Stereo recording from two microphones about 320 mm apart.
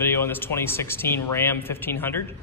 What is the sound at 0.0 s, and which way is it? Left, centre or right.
Speech, centre.